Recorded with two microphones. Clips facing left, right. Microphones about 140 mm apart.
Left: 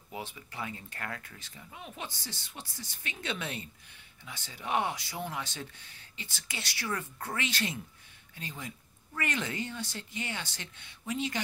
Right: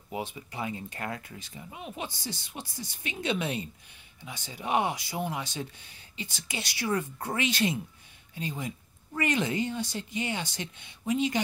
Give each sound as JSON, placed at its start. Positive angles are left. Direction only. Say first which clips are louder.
{"t": 0.1, "sound": "speech", "louder": "right 6 dB", "side_deg": -20}